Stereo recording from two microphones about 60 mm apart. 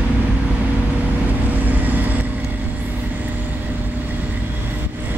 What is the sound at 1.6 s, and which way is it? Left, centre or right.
Vehicle, right.